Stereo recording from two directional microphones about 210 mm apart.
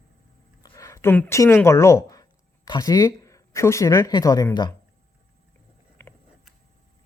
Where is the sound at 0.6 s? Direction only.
15° left (ahead or behind).